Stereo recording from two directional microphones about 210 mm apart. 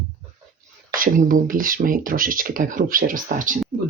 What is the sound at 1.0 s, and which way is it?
Speech, 40° right (ahead or behind).